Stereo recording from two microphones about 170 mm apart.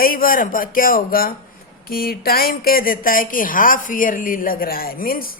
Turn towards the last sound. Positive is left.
turn(degrees=60)  # may be behind; listen again after turning